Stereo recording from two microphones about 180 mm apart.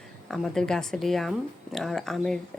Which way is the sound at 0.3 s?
Centre (ahead or behind).